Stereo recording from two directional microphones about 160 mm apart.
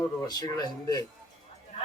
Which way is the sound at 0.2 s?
25° left (ahead or behind).